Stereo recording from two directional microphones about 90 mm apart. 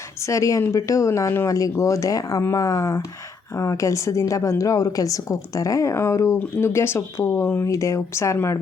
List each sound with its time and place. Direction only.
0.2 s a woman's voice: 35° left (ahead or behind)